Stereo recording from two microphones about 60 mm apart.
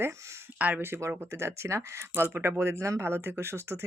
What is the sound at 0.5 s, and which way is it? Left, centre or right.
Speech, right.